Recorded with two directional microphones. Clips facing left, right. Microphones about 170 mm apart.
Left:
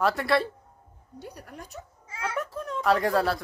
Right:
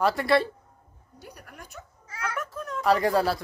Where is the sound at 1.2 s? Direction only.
30° left (ahead or behind).